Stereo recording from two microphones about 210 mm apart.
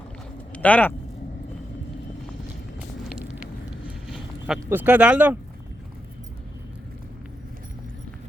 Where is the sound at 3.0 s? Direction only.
Centre (ahead or behind).